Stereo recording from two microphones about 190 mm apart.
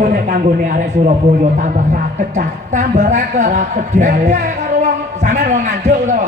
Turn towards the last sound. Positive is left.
turn(degrees=-40)  # may be behind; listen again after turning